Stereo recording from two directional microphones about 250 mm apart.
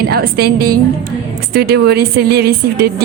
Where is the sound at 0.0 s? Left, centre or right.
Right.